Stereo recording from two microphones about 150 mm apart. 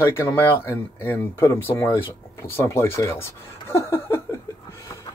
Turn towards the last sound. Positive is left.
turn(degrees=15)  # may be behind; listen again after turning